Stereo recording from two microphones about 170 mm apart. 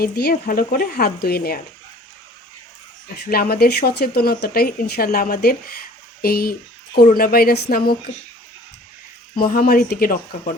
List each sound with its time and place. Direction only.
0.0 s speech: 65° left (ahead or behind)
3.2 s speech: 60° left (ahead or behind)
9.3 s speech: 60° left (ahead or behind)